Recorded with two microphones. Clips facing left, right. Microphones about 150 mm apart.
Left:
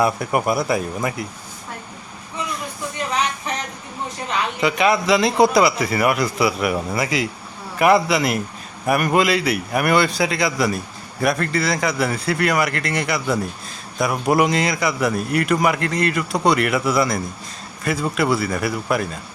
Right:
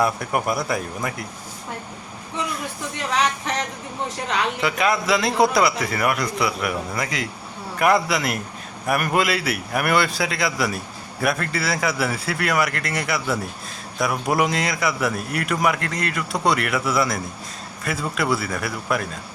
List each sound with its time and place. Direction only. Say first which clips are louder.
0.0 s a man's voice: left 3 dB; centre (ahead or behind)
3.1 s a sound: right 2 dB; 90° right
4.6 s a man's voice: left 6 dB; centre (ahead or behind)